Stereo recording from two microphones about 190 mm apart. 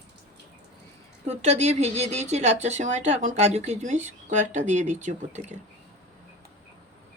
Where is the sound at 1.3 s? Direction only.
35° right (ahead or behind).